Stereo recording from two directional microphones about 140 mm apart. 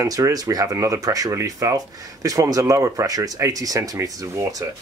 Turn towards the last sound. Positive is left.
turn(degrees=-25)  # may be behind; listen again after turning